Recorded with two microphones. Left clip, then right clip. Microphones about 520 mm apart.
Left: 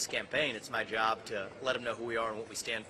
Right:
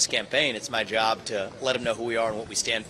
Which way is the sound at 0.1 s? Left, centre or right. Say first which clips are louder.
Right 8 dB; right.